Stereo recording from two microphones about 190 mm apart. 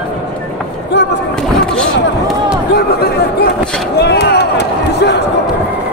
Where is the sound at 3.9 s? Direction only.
60° left (ahead or behind).